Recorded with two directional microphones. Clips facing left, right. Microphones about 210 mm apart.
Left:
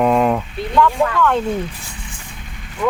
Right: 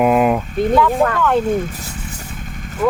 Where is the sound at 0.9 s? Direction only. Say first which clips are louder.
Right 3 dB; 50° right (ahead or behind).